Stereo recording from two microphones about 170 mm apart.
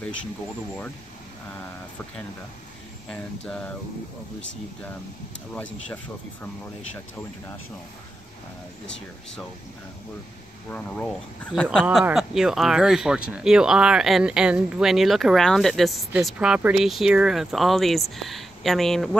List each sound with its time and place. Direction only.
3.1 s speech: 5° left (ahead or behind)
8.8 s speech: 90° left
10.7 s speech: 10° left (ahead or behind)